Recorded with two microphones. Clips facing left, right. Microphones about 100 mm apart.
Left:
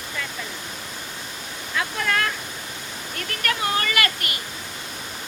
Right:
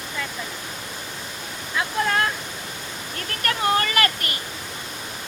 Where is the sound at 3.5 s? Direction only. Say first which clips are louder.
Right 3 dB; 35° right (ahead or behind).